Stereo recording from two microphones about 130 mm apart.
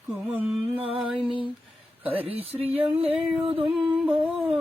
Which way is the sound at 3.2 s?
10° right (ahead or behind).